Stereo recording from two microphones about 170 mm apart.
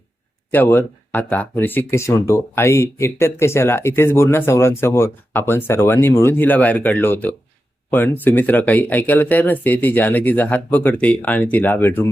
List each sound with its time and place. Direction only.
0.5 s speech: 10° left (ahead or behind)